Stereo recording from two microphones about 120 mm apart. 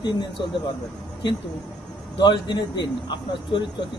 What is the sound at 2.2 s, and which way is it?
A man's voice, 40° left (ahead or behind).